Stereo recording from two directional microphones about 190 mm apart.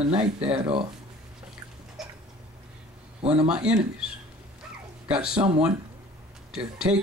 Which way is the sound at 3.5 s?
5° right (ahead or behind).